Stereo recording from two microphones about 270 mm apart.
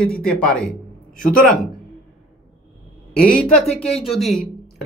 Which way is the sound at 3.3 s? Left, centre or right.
Centre.